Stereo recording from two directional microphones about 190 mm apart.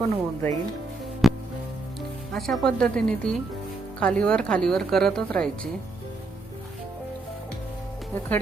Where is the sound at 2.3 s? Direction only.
Centre (ahead or behind).